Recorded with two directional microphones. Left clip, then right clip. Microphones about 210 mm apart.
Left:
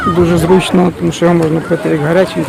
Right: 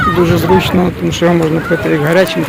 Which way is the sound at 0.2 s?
10° left (ahead or behind).